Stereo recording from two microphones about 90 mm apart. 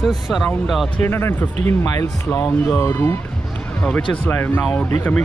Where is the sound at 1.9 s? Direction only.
40° left (ahead or behind).